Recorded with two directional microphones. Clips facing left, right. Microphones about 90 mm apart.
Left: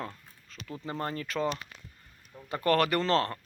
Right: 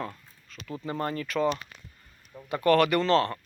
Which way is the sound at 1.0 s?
30° left (ahead or behind).